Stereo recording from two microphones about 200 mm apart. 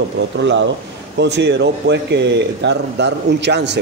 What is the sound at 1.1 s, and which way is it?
Speech, 60° right (ahead or behind).